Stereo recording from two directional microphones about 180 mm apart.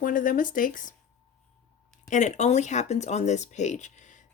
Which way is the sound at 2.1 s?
40° left (ahead or behind).